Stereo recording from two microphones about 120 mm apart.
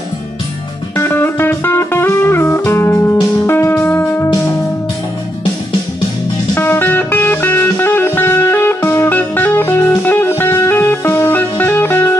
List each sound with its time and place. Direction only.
0.9 s music: 20° left (ahead or behind)
6.5 s music: 20° left (ahead or behind)